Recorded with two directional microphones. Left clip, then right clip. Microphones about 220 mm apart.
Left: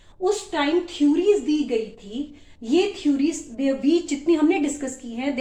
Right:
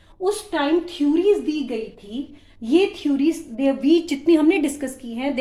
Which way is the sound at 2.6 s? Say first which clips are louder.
Right 2 dB; 40° right (ahead or behind).